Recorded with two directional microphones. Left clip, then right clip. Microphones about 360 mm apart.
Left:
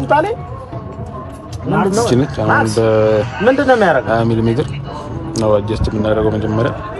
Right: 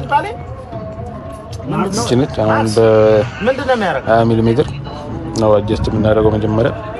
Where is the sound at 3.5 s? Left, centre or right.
Left.